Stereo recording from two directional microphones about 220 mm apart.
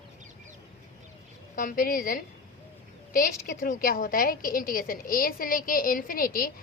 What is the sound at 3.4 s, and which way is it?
A woman's voice, 40° left (ahead or behind).